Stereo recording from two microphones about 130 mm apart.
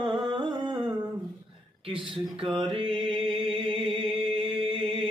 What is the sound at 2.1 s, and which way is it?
Mantra, 40° right (ahead or behind).